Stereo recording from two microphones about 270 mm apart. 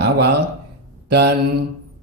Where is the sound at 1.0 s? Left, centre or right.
Right.